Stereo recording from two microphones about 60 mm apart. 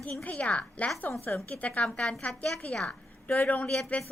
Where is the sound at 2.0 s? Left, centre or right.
Centre.